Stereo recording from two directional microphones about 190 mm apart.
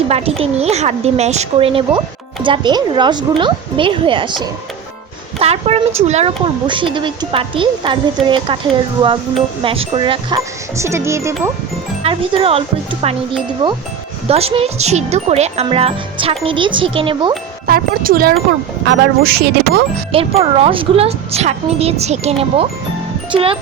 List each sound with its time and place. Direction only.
0.1 s speech: 30° right (ahead or behind)
10.8 s music: 15° right (ahead or behind)
12.0 s speech: 30° right (ahead or behind)
17.7 s speech: 50° right (ahead or behind)
20.1 s speech: 30° right (ahead or behind)